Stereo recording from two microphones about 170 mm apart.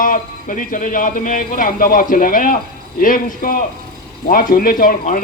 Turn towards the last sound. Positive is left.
turn(degrees=55)  # may be behind; listen again after turning